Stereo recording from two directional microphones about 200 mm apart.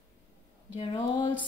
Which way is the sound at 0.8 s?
20° left (ahead or behind).